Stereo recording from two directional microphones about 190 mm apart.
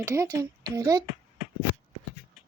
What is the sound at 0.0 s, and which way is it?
Speech, 15° right (ahead or behind).